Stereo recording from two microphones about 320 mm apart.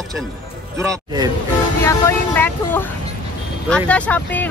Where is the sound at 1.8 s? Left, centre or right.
Centre.